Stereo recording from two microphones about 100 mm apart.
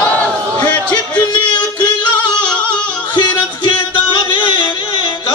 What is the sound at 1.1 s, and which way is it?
Yodeling, 45° left (ahead or behind).